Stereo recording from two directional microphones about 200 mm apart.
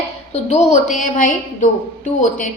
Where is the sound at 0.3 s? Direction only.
35° left (ahead or behind).